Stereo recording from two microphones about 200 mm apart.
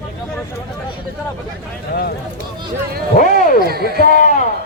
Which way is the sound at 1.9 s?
50° left (ahead or behind).